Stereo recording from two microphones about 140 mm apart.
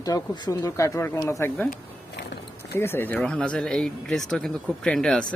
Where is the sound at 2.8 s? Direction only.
15° left (ahead or behind).